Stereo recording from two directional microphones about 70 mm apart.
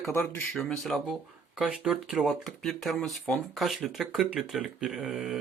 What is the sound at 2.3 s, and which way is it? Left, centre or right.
Speech, centre.